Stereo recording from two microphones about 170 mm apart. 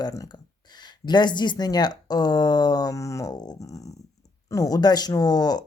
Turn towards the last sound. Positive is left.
turn(degrees=25)  # may be behind; listen again after turning